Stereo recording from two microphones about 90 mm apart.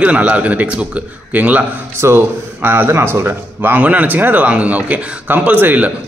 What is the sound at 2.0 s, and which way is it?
Speech, 30° right (ahead or behind).